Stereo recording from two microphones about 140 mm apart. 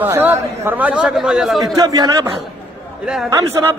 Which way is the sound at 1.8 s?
25° right (ahead or behind).